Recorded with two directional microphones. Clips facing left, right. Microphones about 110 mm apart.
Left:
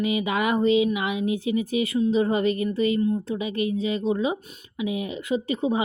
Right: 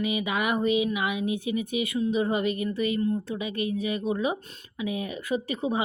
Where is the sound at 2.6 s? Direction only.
25° left (ahead or behind).